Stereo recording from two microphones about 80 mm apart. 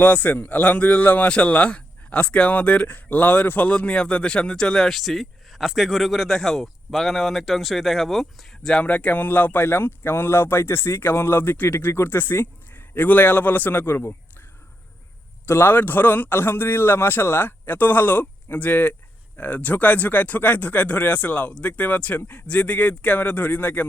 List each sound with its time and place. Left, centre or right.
0.0 s a man's voice: left
15.4 s a man's voice: left
22.4 s a man's voice: centre